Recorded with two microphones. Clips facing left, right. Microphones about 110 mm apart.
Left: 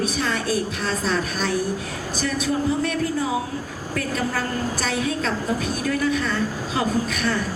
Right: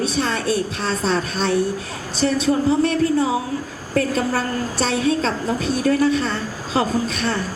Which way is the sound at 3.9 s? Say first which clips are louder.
Right 6 dB; 30° right (ahead or behind).